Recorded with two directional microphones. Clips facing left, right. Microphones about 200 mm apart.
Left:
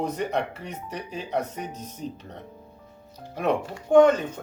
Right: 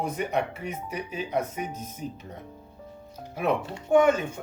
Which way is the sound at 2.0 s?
30° left (ahead or behind).